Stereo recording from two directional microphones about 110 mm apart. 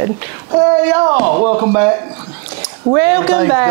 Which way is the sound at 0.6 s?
20° right (ahead or behind).